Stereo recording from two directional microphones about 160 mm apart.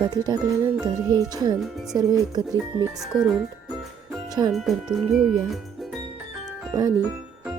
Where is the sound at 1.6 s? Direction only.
Centre (ahead or behind).